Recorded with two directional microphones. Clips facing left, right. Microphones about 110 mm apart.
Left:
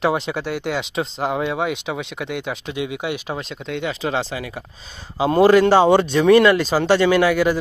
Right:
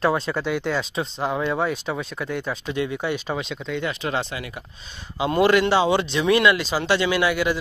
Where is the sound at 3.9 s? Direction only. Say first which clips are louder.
Left 5 dB; 30° left (ahead or behind).